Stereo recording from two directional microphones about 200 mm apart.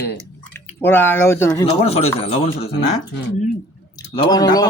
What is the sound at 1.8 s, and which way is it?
Speech, 30° left (ahead or behind).